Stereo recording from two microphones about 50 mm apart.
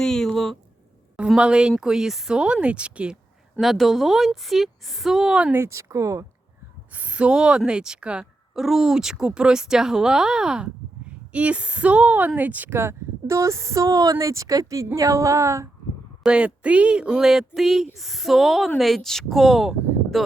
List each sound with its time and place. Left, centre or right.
0.0 s a sound: centre
1.4 s speech: centre
3.6 s a woman's voice: centre
5.5 s speech: right
6.9 s speech: right
8.5 s speech: centre
11.3 s speech: right
12.7 s speech: right
16.2 s a woman's voice: centre